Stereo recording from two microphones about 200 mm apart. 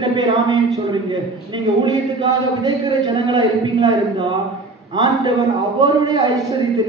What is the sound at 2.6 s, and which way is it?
A man's voice, 20° right (ahead or behind).